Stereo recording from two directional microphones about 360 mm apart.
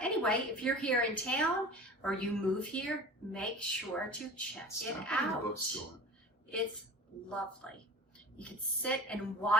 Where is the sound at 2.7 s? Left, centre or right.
Centre.